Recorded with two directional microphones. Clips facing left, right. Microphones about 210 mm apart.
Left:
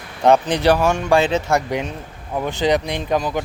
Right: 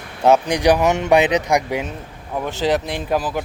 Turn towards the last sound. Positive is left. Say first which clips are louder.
# left 1 dB
turn(degrees=-5)  # may be behind; listen again after turning